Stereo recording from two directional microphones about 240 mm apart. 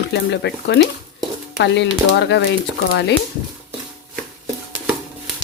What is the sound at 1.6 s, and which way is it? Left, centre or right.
Speech, left.